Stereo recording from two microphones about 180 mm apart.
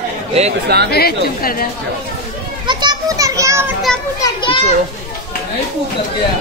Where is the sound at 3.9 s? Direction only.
5° left (ahead or behind).